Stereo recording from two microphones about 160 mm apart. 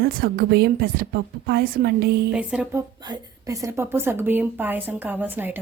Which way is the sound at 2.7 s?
20° right (ahead or behind).